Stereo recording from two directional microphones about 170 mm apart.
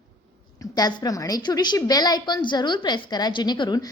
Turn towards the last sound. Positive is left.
turn(degrees=25)  # may be behind; listen again after turning